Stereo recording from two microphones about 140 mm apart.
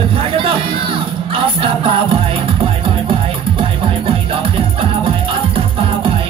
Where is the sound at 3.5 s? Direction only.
40° right (ahead or behind).